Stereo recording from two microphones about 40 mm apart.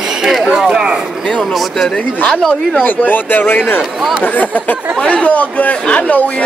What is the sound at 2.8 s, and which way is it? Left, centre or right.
Speech, left.